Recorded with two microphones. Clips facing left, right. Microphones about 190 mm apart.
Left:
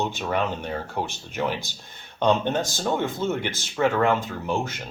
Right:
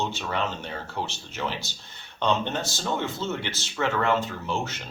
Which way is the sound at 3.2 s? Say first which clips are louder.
Left 4 dB; 55° left (ahead or behind).